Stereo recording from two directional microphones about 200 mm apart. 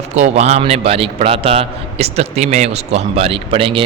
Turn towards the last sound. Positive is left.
turn(degrees=-25)  # may be behind; listen again after turning